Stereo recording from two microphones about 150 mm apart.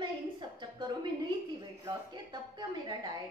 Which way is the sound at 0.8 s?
30° right (ahead or behind).